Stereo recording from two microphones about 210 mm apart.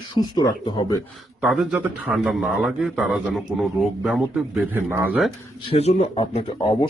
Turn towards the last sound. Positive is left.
turn(degrees=25)  # may be behind; listen again after turning